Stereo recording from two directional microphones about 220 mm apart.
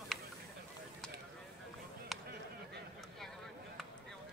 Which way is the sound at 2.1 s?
Centre (ahead or behind).